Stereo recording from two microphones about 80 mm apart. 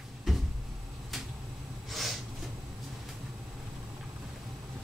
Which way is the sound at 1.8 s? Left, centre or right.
Centre.